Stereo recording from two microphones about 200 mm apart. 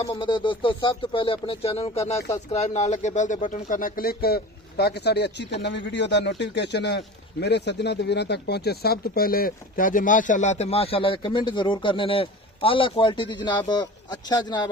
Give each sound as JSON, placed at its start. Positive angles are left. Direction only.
{"t": 0.0, "sound": "speech", "side_deg": 25}